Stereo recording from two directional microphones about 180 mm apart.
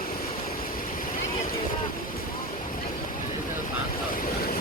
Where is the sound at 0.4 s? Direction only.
50° left (ahead or behind).